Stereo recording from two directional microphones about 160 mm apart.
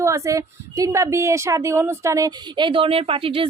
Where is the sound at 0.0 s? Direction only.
20° right (ahead or behind).